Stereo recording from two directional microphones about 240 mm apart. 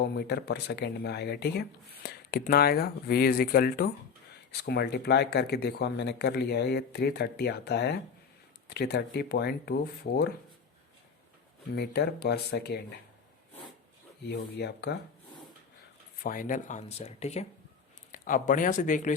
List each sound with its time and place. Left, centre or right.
0.0 s speech: left
11.7 s speech: left
14.3 s speech: left
16.2 s speech: left